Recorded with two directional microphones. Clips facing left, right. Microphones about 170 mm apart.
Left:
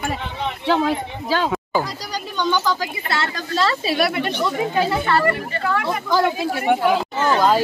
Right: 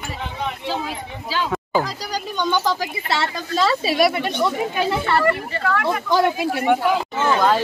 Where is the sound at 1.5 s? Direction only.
5° left (ahead or behind).